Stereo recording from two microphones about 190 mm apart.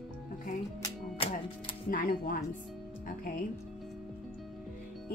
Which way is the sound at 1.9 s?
50° left (ahead or behind).